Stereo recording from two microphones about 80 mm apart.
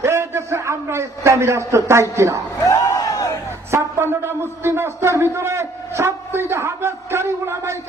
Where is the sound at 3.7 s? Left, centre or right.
Right.